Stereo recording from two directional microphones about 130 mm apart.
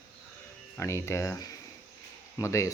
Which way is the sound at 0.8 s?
20° left (ahead or behind).